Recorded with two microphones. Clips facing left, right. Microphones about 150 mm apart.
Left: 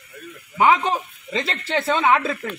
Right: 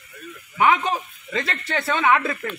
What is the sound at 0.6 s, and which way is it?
Speech, 30° left (ahead or behind).